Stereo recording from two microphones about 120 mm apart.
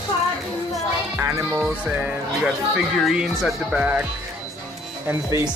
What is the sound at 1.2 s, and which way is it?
Music, 25° right (ahead or behind).